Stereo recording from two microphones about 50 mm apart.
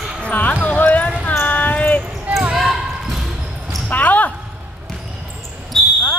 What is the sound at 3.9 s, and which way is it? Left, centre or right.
Speech, left.